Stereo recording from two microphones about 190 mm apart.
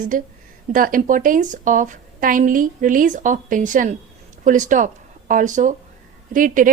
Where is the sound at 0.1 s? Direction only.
45° right (ahead or behind).